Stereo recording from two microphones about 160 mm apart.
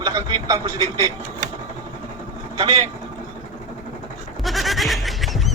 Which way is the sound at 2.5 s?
35° right (ahead or behind).